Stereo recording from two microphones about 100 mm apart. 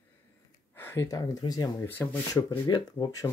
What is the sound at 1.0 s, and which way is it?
Speech, 35° left (ahead or behind).